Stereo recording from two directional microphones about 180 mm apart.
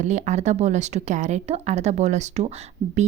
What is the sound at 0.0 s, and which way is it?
A woman's voice, 40° right (ahead or behind).